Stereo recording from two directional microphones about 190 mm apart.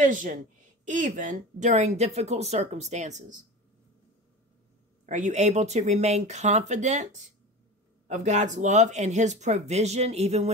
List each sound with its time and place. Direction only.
0.0 s speech: 45° right (ahead or behind)
5.0 s speech: 40° right (ahead or behind)